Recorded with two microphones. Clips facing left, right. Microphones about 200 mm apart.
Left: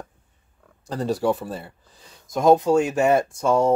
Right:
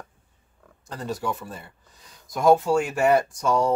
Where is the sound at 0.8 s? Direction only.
35° left (ahead or behind).